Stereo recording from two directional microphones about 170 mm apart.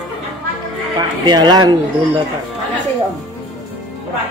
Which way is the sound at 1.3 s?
25° right (ahead or behind).